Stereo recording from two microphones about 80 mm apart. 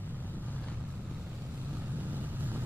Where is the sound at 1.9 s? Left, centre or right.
Right.